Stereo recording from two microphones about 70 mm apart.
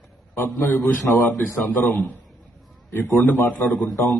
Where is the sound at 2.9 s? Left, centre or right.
Left.